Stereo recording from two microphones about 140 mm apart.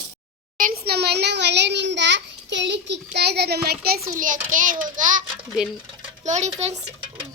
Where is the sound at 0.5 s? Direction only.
85° right.